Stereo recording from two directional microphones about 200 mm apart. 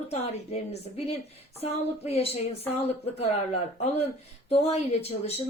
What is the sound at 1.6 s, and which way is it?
Speech, 30° left (ahead or behind).